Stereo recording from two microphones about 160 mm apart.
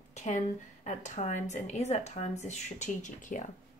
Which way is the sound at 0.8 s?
50° left (ahead or behind).